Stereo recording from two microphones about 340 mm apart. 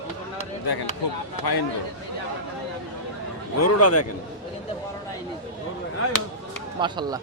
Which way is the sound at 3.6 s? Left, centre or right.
Left.